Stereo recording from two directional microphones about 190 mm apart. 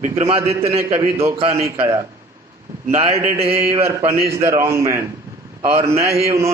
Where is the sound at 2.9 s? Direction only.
30° right (ahead or behind).